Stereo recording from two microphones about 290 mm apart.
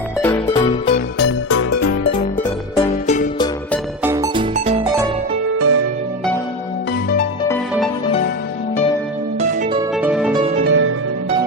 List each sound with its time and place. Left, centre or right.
0.2 s music: centre
0.6 s music: left
1.2 s music: left
2.7 s music: left
4.0 s music: centre
4.5 s music: right
5.5 s music: right
7.4 s music: centre
9.4 s music: right
9.9 s music: centre
10.3 s music: right
10.7 s music: right